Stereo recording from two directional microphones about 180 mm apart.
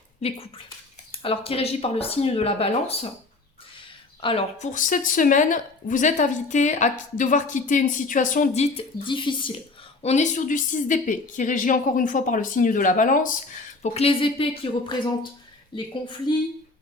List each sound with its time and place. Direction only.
0.2 s speech: 35° left (ahead or behind)
4.2 s speech: 30° left (ahead or behind)
10.0 s speech: 40° left (ahead or behind)
13.8 s a woman's voice: 35° left (ahead or behind)